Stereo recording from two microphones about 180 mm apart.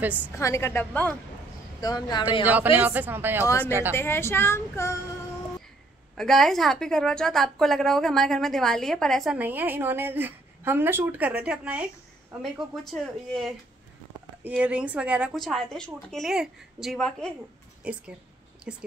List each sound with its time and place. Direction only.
0.4 s a woman's voice: 15° left (ahead or behind)
1.8 s speech: 20° left (ahead or behind)
2.4 s speech: 10° right (ahead or behind)
3.4 s a woman's voice: 10° left (ahead or behind)
6.1 s a woman's voice: centre (ahead or behind)